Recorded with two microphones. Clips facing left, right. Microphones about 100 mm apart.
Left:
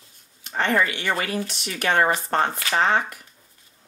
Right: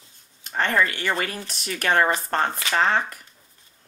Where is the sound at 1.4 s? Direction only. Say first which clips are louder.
Left 1 dB; 40° right (ahead or behind).